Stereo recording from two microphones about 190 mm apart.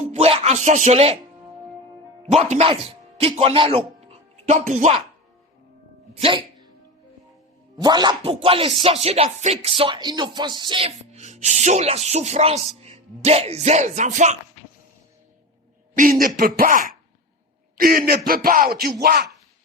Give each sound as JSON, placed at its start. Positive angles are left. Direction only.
{"t": 0.0, "sound": "speech", "side_deg": -35}
{"t": 2.3, "sound": "speech", "side_deg": -35}
{"t": 6.1, "sound": "music", "side_deg": -30}
{"t": 7.8, "sound": "speech", "side_deg": -20}
{"t": 16.2, "sound": "speech", "side_deg": -45}